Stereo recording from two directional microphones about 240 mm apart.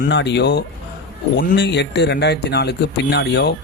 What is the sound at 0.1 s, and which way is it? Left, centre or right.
A man's voice, left.